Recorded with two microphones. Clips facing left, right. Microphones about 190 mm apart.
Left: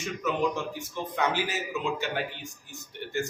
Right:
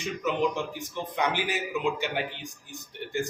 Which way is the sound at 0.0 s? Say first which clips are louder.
Right 1 dB; 15° right (ahead or behind).